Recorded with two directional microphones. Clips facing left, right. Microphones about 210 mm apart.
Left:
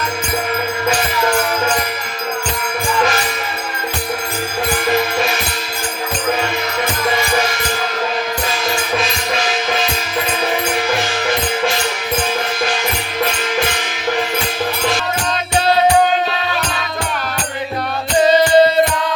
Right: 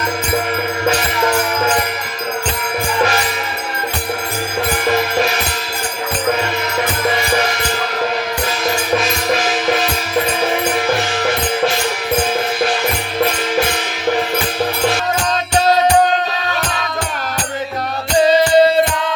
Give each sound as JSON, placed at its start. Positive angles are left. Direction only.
{"t": 18.2, "sound": "music", "side_deg": -30}